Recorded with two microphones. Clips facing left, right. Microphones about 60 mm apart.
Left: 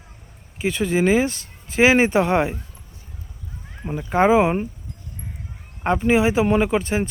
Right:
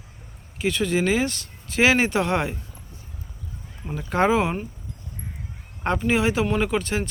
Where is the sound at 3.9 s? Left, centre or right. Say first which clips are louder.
Left 4 dB; centre.